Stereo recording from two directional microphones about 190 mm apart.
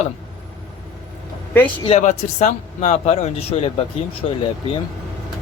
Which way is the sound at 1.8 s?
35° left (ahead or behind).